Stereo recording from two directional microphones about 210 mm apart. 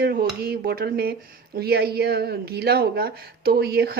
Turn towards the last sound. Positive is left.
turn(degrees=-45)  # may be behind; listen again after turning